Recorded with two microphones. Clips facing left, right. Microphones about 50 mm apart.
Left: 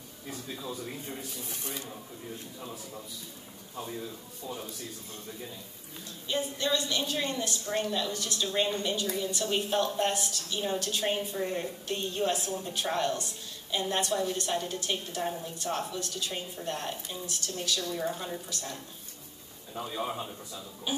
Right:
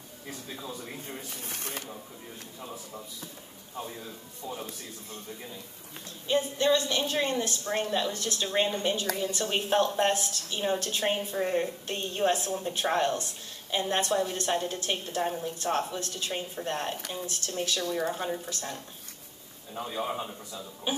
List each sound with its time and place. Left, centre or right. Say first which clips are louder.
1.3 s speech: right 1 dB; right
4.4 s a man's voice: right 1 dB; right
6.2 s a woman's voice: right 6 dB; right
19.9 s a man's voice: right 2 dB; centre